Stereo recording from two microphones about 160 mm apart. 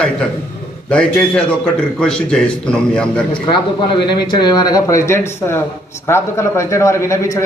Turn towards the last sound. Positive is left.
turn(degrees=20)  # may be behind; listen again after turning